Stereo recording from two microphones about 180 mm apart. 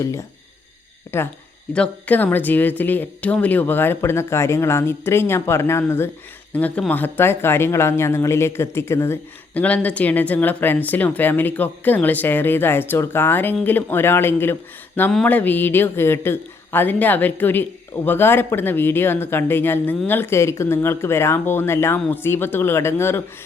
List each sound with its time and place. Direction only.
0.0 s speech: 15° left (ahead or behind)